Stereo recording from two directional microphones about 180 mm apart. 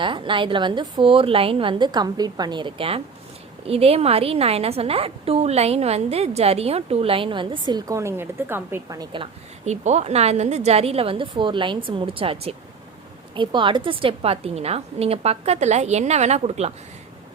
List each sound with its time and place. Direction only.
0.0 s a woman's voice: 25° right (ahead or behind)